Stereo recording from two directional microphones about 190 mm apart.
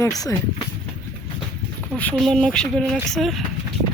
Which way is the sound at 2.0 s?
5° left (ahead or behind).